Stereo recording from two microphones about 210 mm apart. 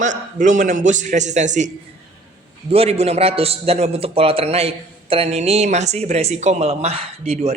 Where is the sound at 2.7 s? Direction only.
30° right (ahead or behind).